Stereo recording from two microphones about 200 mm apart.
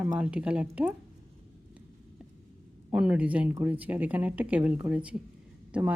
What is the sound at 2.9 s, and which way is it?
Speech, 5° right (ahead or behind).